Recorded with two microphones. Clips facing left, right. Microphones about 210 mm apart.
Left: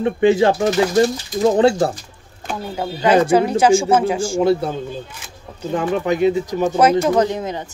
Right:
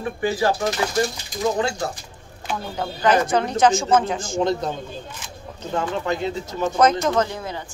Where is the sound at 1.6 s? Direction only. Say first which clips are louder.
Left 10 dB; 30° left (ahead or behind).